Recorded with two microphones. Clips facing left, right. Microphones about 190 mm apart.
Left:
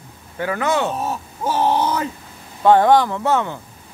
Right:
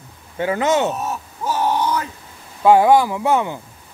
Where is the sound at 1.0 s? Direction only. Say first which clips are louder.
Left 1 dB; 30° left (ahead or behind).